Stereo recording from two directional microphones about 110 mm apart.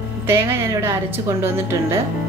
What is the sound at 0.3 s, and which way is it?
A woman's voice, 25° right (ahead or behind).